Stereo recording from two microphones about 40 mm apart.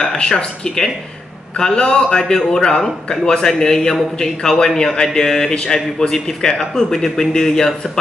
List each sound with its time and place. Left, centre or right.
0.0 s a man's voice: centre